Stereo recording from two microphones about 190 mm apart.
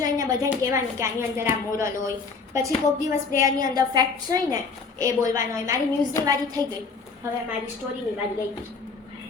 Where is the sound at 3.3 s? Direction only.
20° right (ahead or behind).